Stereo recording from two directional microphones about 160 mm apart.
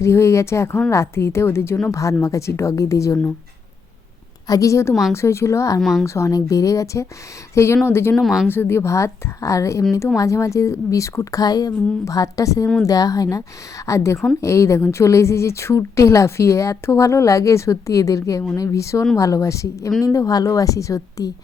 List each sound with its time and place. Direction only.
0.0 s a woman's voice: 15° left (ahead or behind)
4.4 s a woman's voice: 20° left (ahead or behind)
5.8 s speech: centre (ahead or behind)
6.1 s a woman's voice: 20° left (ahead or behind)
8.1 s speech: centre (ahead or behind)
8.4 s a woman's voice: 15° left (ahead or behind)